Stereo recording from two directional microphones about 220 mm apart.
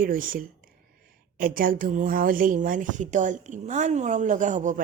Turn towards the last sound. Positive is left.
turn(degrees=-35)  # may be behind; listen again after turning